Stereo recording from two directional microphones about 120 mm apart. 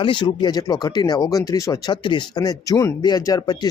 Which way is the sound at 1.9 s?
40° left (ahead or behind).